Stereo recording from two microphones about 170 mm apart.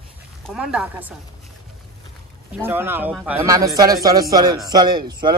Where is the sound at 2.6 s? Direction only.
15° right (ahead or behind).